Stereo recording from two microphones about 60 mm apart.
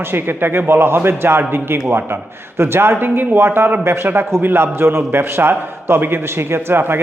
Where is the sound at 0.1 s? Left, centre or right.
Right.